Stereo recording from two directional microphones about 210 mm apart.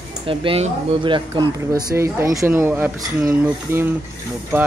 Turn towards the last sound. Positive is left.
turn(degrees=-10)  # may be behind; listen again after turning